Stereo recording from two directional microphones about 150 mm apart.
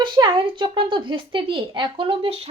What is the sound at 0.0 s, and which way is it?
A woman's voice, 30° right (ahead or behind).